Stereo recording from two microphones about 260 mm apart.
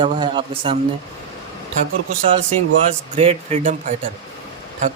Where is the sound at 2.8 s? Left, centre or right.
Right.